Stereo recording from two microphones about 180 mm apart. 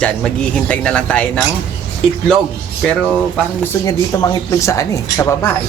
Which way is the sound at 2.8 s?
5° left (ahead or behind).